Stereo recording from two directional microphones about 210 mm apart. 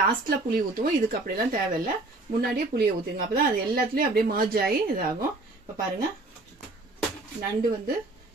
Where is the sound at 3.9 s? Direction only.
45° right (ahead or behind).